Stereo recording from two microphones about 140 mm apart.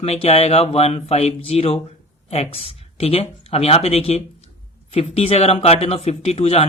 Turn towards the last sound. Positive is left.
turn(degrees=45)  # may be behind; listen again after turning